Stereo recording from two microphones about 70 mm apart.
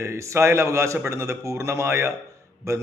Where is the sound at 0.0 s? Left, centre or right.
Right.